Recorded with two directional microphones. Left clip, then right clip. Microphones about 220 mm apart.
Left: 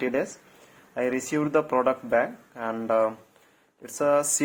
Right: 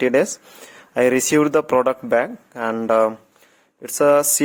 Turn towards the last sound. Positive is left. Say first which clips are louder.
# right 8 dB
turn(degrees=-35)  # may be behind; listen again after turning